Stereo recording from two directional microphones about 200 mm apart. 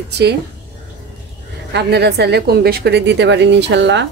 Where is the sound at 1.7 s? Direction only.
55° right (ahead or behind).